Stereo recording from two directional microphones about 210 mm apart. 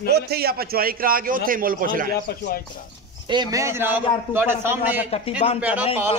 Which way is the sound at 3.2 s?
20° right (ahead or behind).